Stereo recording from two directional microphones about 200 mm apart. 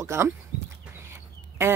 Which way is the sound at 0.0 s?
15° right (ahead or behind).